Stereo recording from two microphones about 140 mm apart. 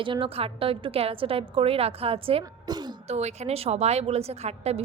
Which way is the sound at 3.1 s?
50° right (ahead or behind).